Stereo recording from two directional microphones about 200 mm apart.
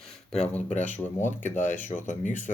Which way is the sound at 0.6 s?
35° left (ahead or behind).